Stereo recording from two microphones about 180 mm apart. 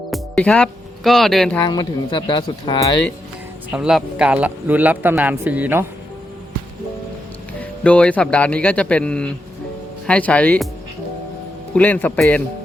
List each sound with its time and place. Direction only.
0.1 s speech: 5° left (ahead or behind)
1.6 s speech: 25° left (ahead or behind)
3.7 s speech: 5° right (ahead or behind)
7.6 s speech: 5° left (ahead or behind)
11.7 s speech: 10° left (ahead or behind)